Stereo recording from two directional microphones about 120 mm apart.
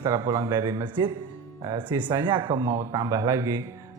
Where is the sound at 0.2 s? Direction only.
30° right (ahead or behind).